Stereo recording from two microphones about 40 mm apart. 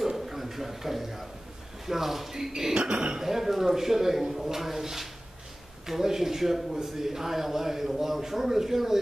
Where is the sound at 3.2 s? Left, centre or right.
Centre.